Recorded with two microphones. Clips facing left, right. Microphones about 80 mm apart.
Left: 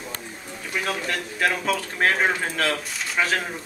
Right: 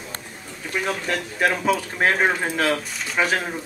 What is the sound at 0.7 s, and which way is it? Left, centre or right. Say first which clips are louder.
Speech: right 2 dB; centre.